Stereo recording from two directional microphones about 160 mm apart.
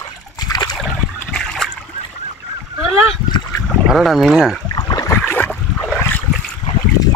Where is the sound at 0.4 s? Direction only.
25° left (ahead or behind).